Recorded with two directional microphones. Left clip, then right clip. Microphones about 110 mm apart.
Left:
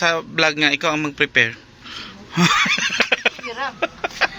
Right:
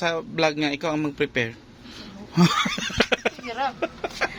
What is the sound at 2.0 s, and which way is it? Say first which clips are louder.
Neigh: left 3 dB; 25° right (ahead or behind).